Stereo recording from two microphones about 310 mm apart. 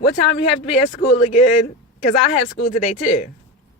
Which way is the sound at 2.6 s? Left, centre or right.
Left.